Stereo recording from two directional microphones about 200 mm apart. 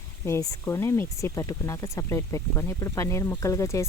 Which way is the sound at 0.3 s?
15° left (ahead or behind).